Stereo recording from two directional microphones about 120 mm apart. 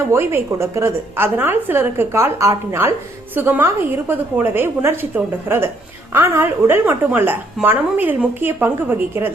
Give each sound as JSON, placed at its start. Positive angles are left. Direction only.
{"t": 0.1, "sound": "a woman's voice", "side_deg": -20}